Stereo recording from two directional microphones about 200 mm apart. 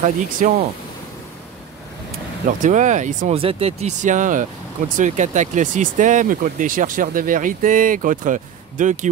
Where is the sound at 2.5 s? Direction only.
40° right (ahead or behind).